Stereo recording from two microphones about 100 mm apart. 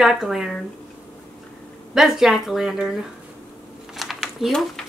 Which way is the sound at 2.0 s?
5° right (ahead or behind).